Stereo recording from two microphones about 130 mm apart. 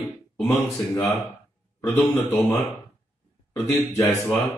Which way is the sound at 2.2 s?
15° left (ahead or behind).